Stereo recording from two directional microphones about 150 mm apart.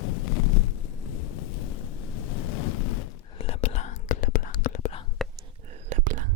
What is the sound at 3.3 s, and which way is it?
Whispering, 40° left (ahead or behind).